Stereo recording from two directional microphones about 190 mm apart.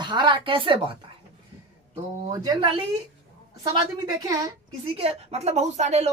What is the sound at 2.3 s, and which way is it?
A woman's voice, 25° right (ahead or behind).